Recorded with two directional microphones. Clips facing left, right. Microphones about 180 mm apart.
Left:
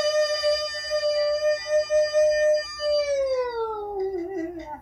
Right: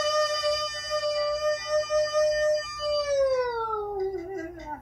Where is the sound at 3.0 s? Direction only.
25° left (ahead or behind).